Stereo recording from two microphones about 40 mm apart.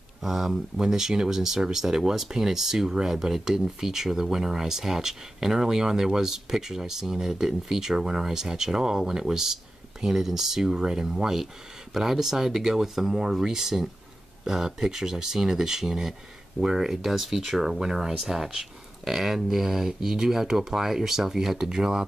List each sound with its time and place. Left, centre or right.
0.2 s speech: centre